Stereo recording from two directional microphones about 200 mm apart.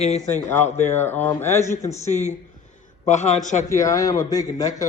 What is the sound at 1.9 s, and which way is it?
A man's voice, 35° left (ahead or behind).